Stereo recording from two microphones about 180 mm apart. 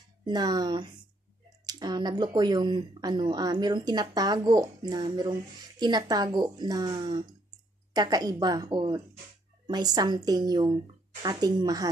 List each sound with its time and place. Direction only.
0.2 s speech: 20° right (ahead or behind)